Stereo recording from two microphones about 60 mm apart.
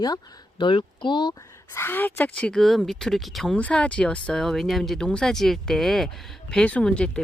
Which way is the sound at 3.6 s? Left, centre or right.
Left.